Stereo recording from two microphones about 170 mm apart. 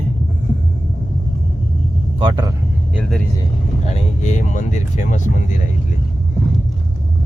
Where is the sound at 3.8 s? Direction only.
40° left (ahead or behind).